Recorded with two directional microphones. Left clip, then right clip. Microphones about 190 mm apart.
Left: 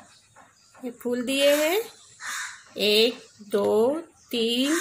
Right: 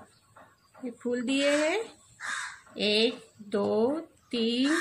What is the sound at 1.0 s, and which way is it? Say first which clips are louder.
Speech: left 5 dB; 65° left (ahead or behind).